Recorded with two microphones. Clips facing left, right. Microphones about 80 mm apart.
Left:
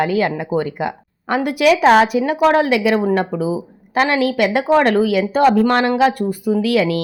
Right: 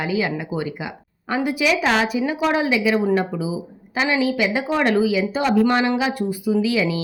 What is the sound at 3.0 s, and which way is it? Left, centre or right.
Speech, left.